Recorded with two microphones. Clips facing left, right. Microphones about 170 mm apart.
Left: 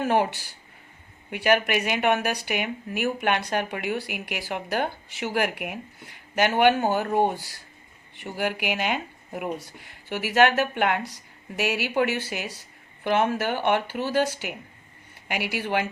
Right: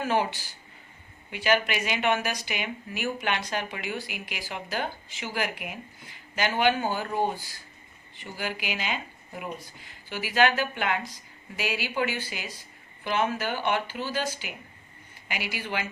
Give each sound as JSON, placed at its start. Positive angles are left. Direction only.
{"t": 0.0, "sound": "speech", "side_deg": 55}